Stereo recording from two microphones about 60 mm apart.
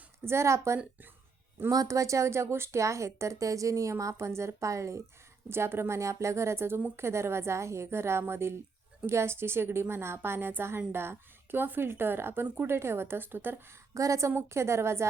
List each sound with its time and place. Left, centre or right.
0.3 s a woman's voice: right
1.7 s a woman's voice: right
5.5 s a woman's voice: right
13.9 s a woman's voice: right